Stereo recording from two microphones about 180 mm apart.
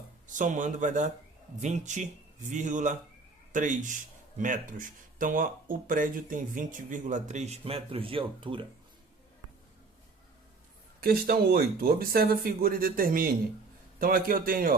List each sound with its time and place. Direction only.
0.3 s speech: 45° right (ahead or behind); by 8.6 s 30° right (ahead or behind)
11.0 s speech: 55° right (ahead or behind)